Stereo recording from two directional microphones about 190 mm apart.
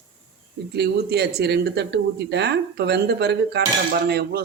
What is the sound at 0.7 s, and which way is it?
Speech, 60° right (ahead or behind).